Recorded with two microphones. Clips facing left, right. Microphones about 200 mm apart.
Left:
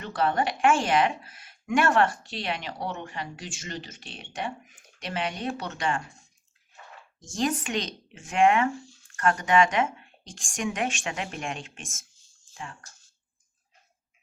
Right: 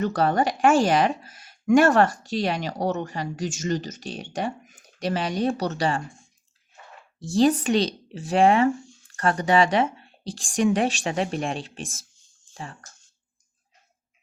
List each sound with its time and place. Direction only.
0.0 s speech: 40° right (ahead or behind)
7.2 s speech: 35° right (ahead or behind)